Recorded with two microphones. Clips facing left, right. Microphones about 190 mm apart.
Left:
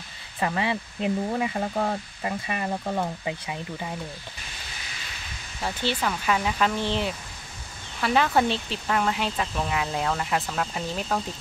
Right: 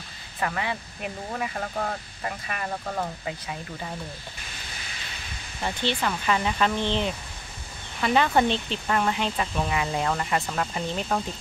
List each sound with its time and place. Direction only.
0.4 s speech: 25° left (ahead or behind)
5.6 s speech: 5° left (ahead or behind)